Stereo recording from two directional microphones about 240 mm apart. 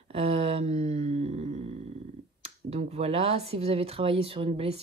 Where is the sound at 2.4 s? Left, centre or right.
Right.